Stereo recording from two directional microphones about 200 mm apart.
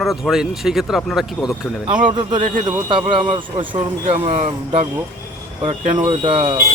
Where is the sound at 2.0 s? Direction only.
25° right (ahead or behind).